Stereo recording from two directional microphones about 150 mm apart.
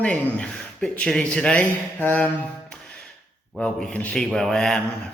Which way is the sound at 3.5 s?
5° left (ahead or behind).